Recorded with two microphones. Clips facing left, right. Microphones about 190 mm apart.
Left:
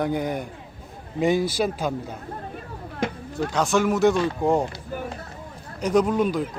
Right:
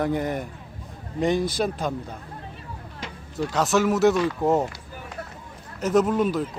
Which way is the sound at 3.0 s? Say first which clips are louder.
Left 12 dB; 50° left (ahead or behind).